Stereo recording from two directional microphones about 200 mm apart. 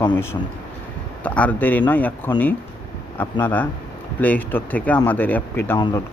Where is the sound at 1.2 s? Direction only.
5° left (ahead or behind).